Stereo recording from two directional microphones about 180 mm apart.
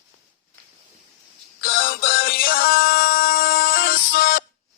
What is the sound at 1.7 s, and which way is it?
Music, 55° left (ahead or behind).